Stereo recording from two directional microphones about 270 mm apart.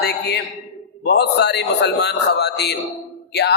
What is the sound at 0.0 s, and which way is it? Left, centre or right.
A man's voice, left.